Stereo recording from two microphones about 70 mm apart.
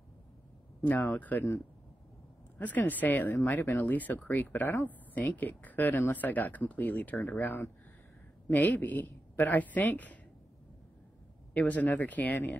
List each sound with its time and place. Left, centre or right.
0.8 s speech: left
2.6 s speech: left
11.5 s speech: left